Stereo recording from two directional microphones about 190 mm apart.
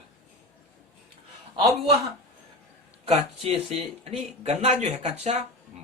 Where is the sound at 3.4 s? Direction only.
35° right (ahead or behind).